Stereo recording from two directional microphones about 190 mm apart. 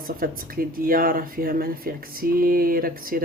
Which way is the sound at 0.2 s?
50° right (ahead or behind).